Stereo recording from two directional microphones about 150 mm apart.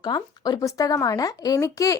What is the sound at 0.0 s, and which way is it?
A woman's voice, 30° left (ahead or behind).